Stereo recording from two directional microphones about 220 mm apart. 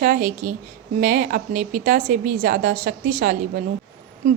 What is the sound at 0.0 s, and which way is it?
A woman's voice, 40° right (ahead or behind).